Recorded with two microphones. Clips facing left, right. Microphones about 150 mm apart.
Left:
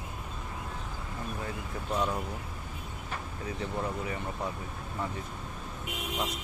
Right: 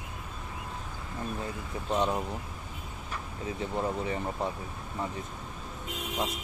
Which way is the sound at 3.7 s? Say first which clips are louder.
Right 4 dB; 25° right (ahead or behind).